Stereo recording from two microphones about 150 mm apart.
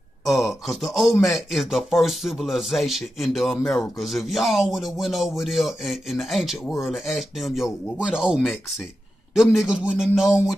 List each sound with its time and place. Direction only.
0.2 s speech: centre (ahead or behind)